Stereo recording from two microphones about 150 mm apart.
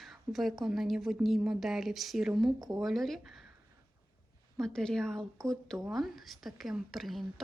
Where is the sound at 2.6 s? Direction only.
25° right (ahead or behind).